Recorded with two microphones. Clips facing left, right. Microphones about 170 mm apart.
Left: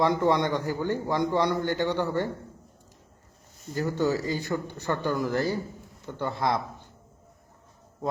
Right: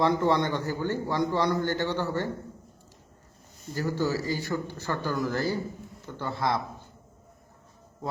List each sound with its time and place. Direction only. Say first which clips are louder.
0.0 s a man's voice: left 1 dB; 15° left (ahead or behind)
3.8 s speech: left 2 dB; 20° left (ahead or behind)